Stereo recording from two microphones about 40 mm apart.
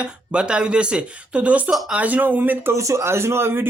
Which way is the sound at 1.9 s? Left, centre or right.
Right.